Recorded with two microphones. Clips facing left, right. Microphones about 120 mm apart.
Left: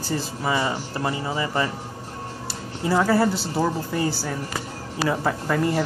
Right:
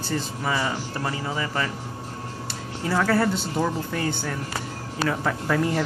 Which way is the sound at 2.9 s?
10° left (ahead or behind).